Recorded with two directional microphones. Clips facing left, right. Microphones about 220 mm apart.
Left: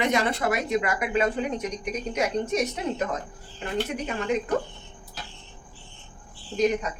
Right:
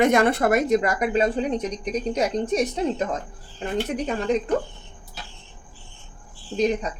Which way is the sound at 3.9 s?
35° right (ahead or behind).